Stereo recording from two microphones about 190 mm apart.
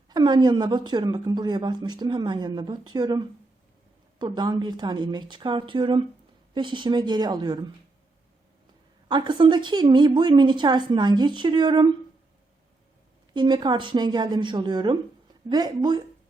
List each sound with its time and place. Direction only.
0.1 s a woman's voice: 20° right (ahead or behind)
9.0 s a woman's voice: 25° right (ahead or behind)
13.3 s a woman's voice: 25° right (ahead or behind)